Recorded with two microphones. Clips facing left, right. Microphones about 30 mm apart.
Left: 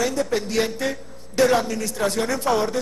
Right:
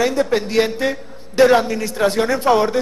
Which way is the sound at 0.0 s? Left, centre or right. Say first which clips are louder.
Right 5 dB; right.